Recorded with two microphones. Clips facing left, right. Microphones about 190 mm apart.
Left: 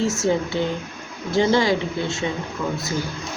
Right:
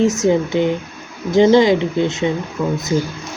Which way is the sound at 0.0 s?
20° right (ahead or behind).